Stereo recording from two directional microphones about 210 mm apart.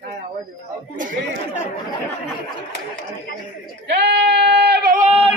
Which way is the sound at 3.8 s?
55° right (ahead or behind).